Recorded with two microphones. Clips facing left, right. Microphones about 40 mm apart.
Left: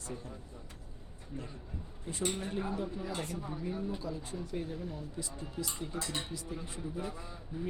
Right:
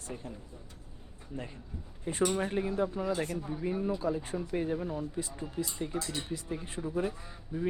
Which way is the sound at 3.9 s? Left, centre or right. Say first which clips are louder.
Right 7 dB; right.